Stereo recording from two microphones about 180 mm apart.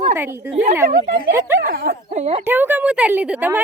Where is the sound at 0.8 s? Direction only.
50° right (ahead or behind).